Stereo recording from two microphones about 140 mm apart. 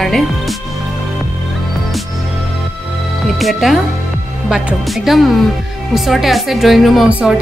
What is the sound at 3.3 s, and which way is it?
A woman's voice, centre (ahead or behind).